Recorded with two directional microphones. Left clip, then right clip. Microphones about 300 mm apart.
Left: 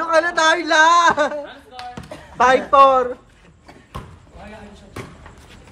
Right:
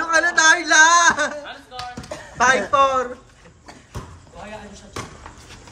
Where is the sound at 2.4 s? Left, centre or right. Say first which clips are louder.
Left 4 dB; centre.